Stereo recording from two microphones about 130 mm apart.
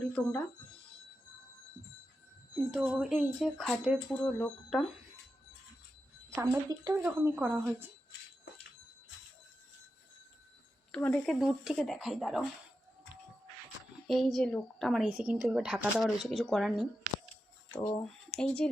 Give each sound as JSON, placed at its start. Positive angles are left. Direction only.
{"t": 0.1, "sound": "speech", "side_deg": 10}
{"t": 2.6, "sound": "speech", "side_deg": -5}
{"t": 4.1, "sound": "speech", "side_deg": 10}
{"t": 6.3, "sound": "a woman's voice", "side_deg": -20}
{"t": 10.9, "sound": "speech", "side_deg": 5}
{"t": 11.3, "sound": "speech", "side_deg": -5}
{"t": 14.1, "sound": "speech", "side_deg": 0}
{"t": 17.7, "sound": "speech", "side_deg": 40}
{"t": 18.0, "sound": "speech", "side_deg": 5}